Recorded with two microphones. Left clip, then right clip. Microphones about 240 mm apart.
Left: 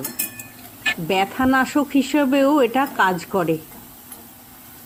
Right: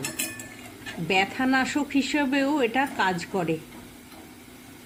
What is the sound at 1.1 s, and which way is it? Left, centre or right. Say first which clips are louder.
Speech: left 3 dB; centre.